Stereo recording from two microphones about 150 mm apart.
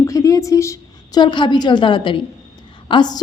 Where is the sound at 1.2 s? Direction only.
30° left (ahead or behind).